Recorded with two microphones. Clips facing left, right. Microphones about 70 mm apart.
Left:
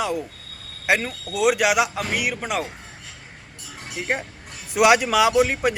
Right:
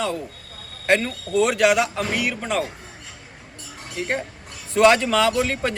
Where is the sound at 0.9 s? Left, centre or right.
Centre.